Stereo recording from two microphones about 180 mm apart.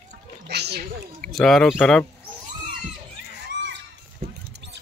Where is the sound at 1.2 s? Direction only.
Centre (ahead or behind).